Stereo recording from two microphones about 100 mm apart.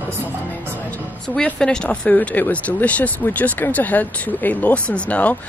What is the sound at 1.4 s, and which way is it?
Speech, 10° left (ahead or behind).